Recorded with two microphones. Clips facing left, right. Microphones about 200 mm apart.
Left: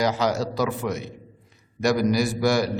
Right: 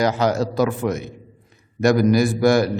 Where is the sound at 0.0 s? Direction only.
55° right (ahead or behind).